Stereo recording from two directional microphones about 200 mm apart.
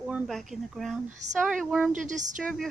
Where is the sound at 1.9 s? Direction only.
40° right (ahead or behind).